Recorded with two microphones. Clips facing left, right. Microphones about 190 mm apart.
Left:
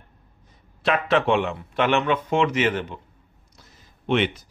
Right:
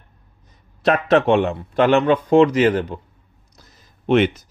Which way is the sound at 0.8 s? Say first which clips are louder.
Right 5 dB; 40° right (ahead or behind).